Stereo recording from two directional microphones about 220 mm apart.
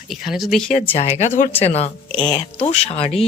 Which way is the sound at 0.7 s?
30° left (ahead or behind).